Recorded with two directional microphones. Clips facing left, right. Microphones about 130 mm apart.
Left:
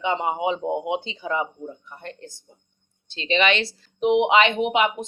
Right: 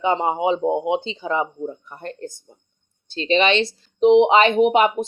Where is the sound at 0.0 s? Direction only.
35° right (ahead or behind).